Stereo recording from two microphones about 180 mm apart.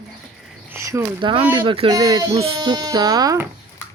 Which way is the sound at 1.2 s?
30° right (ahead or behind).